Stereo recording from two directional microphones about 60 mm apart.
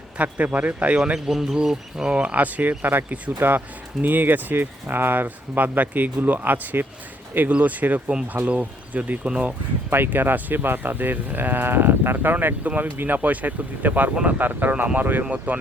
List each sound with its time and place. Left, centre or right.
0.2 s speech: right
1.3 s speech: centre
2.1 s speech: right
9.9 s speech: right